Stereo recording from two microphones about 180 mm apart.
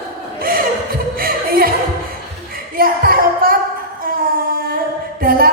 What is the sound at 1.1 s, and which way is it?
Music, 55° right (ahead or behind).